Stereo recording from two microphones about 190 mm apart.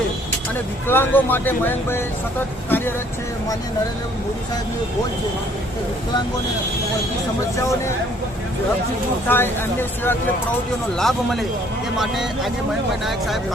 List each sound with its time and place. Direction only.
0.9 s speech: 10° left (ahead or behind)
2.6 s vehicle: 10° left (ahead or behind)
9.2 s speech: 10° left (ahead or behind)
11.0 s speech: centre (ahead or behind)